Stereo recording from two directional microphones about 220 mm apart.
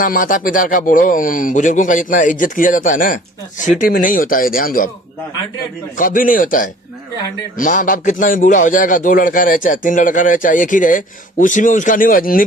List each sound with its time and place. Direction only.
0.0 s a man's voice: 35° left (ahead or behind)
6.0 s a man's voice: 40° left (ahead or behind)